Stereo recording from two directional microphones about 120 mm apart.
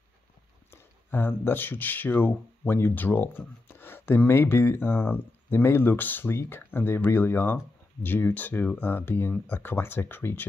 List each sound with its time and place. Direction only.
0.7 s speech: 20° left (ahead or behind)